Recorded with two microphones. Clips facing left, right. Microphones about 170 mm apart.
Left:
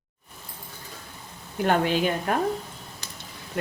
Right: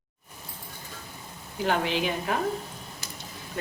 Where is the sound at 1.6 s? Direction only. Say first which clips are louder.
Left 4 dB; 50° left (ahead or behind).